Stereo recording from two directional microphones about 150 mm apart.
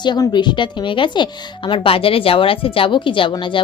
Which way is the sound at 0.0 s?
30° left (ahead or behind).